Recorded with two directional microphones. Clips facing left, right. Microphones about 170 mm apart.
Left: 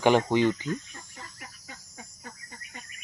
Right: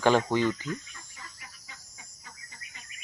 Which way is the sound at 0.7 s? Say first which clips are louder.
Left 3 dB; 45° left (ahead or behind).